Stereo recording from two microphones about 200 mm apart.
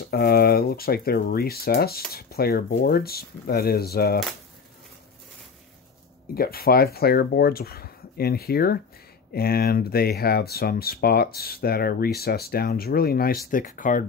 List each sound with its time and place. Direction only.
0.1 s speech: 50° left (ahead or behind)
6.3 s speech: 50° left (ahead or behind)